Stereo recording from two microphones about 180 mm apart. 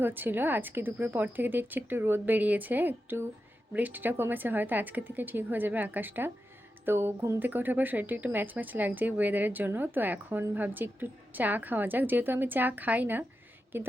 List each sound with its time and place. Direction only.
0.0 s speech: 10° right (ahead or behind)